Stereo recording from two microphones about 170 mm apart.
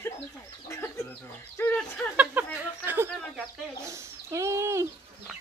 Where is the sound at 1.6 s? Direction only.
10° left (ahead or behind).